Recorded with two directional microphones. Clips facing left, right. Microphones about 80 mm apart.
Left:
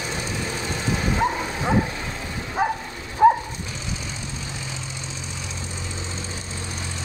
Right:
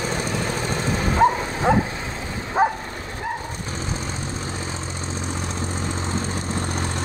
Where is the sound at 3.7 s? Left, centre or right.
Right.